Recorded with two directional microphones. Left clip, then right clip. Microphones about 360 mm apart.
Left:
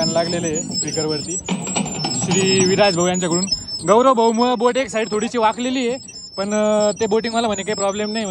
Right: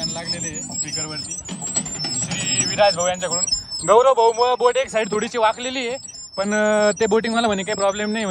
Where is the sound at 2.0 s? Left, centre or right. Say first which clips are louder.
Left 8 dB; centre.